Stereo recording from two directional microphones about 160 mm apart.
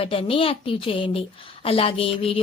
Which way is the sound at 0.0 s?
35° left (ahead or behind).